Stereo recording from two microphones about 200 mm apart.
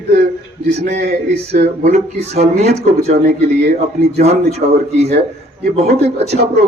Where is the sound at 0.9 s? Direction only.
35° right (ahead or behind).